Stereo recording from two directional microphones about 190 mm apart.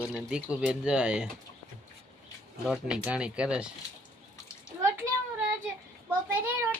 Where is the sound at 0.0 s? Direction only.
5° right (ahead or behind).